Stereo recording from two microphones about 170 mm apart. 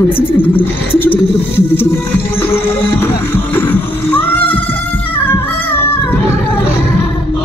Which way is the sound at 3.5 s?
10° left (ahead or behind).